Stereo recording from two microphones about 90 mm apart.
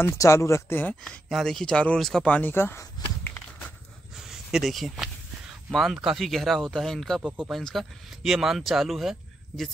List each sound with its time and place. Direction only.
0.0 s speech: 30° left (ahead or behind)
1.3 s speech: 5° left (ahead or behind)
2.2 s speech: 15° left (ahead or behind)
2.5 s speech: 25° left (ahead or behind)
4.3 s speech: 5° right (ahead or behind)